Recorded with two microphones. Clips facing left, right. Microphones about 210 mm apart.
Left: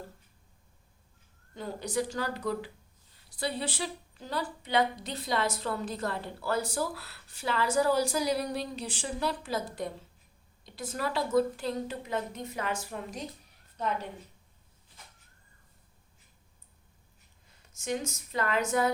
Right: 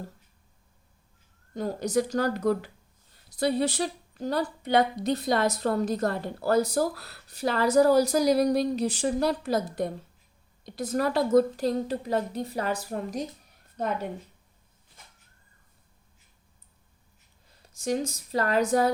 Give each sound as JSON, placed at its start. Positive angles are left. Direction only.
{"t": 1.5, "sound": "a woman's voice", "side_deg": -40}
{"t": 17.5, "sound": "speech", "side_deg": -35}